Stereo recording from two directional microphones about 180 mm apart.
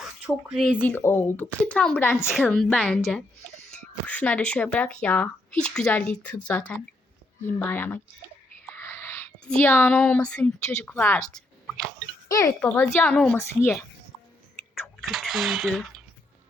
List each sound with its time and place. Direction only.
0.4 s speech: 5° right (ahead or behind)
0.8 s a woman's voice: 10° left (ahead or behind)
4.0 s a woman's voice: 10° left (ahead or behind)
8.6 s whispering: 10° left (ahead or behind)
9.6 s a woman's voice: 5° left (ahead or behind)
12.3 s a woman's voice: 20° left (ahead or behind)
14.8 s a sound: centre (ahead or behind)